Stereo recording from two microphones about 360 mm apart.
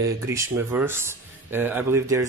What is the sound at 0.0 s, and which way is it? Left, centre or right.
Speech, centre.